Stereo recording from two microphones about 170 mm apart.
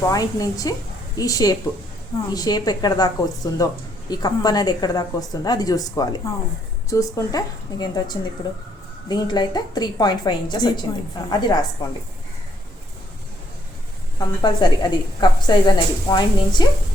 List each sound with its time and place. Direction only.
0.1 s a woman's voice: 20° left (ahead or behind)
14.2 s a woman's voice: 25° left (ahead or behind)